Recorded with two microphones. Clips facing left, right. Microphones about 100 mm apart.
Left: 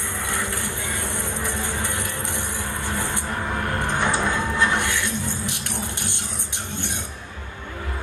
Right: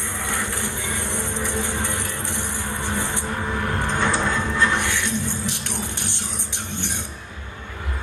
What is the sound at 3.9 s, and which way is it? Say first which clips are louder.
Music: even; 15° left (ahead or behind).